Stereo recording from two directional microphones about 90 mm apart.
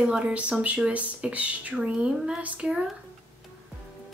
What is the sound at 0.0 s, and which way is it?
Speech, 10° right (ahead or behind).